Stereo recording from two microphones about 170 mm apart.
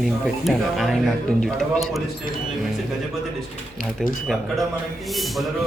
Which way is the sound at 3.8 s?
Centre (ahead or behind).